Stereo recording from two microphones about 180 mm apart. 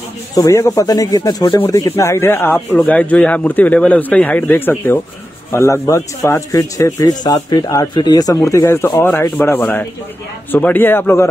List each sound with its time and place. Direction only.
0.4 s speech: 20° left (ahead or behind)
2.5 s speech: centre (ahead or behind)